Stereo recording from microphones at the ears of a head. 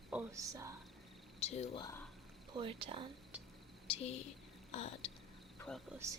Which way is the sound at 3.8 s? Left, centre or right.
Left.